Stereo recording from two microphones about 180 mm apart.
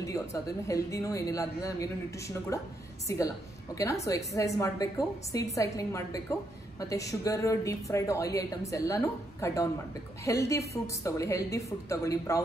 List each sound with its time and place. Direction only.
0.0 s a woman's voice: 20° left (ahead or behind)